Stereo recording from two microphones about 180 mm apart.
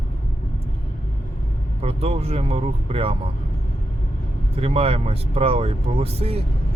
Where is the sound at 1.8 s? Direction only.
35° right (ahead or behind).